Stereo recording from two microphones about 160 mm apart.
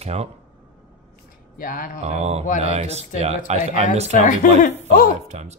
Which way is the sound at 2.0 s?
40° right (ahead or behind).